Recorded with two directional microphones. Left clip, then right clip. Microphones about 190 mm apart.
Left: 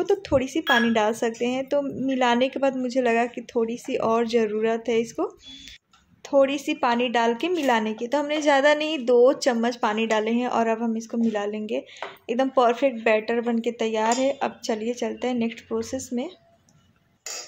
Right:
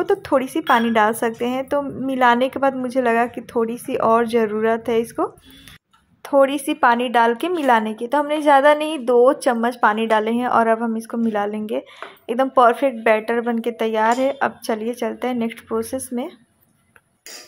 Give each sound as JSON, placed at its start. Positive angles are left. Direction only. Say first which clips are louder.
{"t": 0.0, "sound": "speech", "louder": "right 4 dB", "side_deg": -5}